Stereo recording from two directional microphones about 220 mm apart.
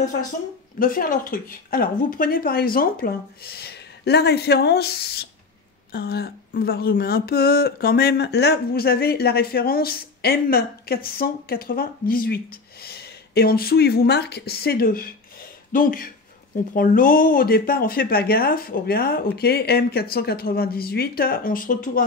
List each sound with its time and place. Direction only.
0.7 s speech: 40° left (ahead or behind)